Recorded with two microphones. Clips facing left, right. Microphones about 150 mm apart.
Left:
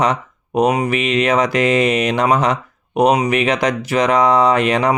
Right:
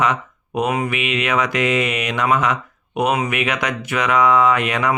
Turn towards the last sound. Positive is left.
turn(degrees=35)  # may be behind; listen again after turning